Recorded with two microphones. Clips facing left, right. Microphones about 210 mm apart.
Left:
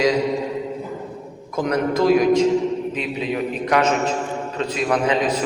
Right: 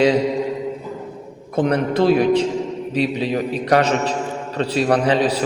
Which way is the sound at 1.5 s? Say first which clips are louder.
Right 2 dB; 30° right (ahead or behind).